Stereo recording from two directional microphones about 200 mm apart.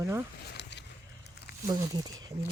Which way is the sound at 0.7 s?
60° left (ahead or behind).